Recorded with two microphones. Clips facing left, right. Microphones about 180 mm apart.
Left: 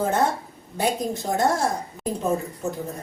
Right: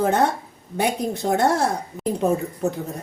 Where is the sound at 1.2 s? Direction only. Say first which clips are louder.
Right 6 dB; 70° right (ahead or behind).